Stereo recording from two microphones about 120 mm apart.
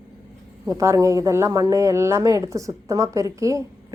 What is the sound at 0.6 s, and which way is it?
A woman's voice, 25° right (ahead or behind).